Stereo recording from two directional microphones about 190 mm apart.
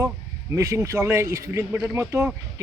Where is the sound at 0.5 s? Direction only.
15° right (ahead or behind).